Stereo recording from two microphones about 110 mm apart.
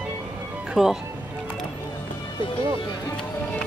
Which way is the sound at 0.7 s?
5° right (ahead or behind).